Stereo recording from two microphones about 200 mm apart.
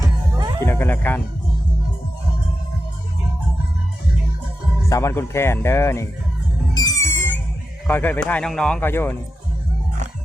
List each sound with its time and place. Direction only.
0.6 s speech: 10° left (ahead or behind)
4.9 s speech: 15° left (ahead or behind)
6.7 s music: 20° left (ahead or behind)
7.9 s speech: 10° left (ahead or behind)